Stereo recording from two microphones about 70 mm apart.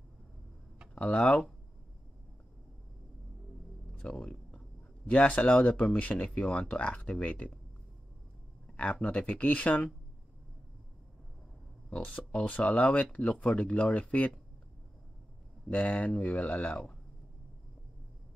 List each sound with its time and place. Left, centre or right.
0.9 s speech: centre
4.0 s speech: centre
8.7 s speech: centre
11.9 s speech: centre
15.7 s speech: left